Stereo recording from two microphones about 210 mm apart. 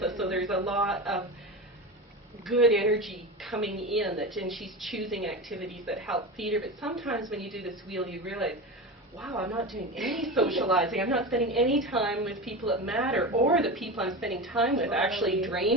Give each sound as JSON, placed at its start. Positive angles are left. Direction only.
{"t": 0.0, "sound": "a man's voice", "side_deg": 0}
{"t": 2.4, "sound": "a woman's voice", "side_deg": 0}
{"t": 9.6, "sound": "a woman's voice", "side_deg": 0}